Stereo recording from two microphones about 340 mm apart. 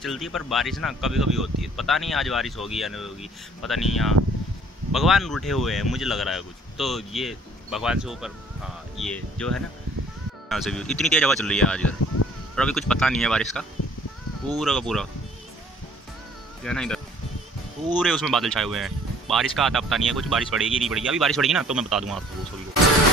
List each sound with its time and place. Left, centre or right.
0.0 s speech: centre
16.6 s speech: centre